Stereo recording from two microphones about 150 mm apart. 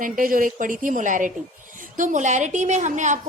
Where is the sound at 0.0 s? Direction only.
65° right (ahead or behind).